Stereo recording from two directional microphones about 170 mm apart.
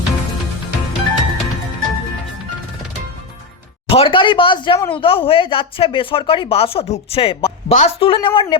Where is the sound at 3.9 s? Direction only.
30° left (ahead or behind).